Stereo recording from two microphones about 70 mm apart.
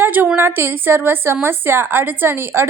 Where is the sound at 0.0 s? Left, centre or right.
Right.